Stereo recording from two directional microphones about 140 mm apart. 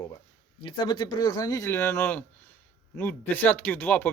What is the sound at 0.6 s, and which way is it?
A man's voice, 35° left (ahead or behind).